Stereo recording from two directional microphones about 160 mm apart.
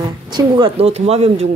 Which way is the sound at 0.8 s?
40° right (ahead or behind).